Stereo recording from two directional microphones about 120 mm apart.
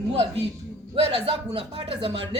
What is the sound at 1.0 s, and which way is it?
A woman's voice, 50° right (ahead or behind).